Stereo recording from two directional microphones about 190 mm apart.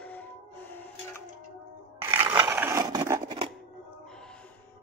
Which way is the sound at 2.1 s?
25° right (ahead or behind).